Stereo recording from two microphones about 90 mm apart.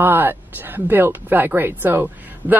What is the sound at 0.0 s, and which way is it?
Speech, 20° right (ahead or behind).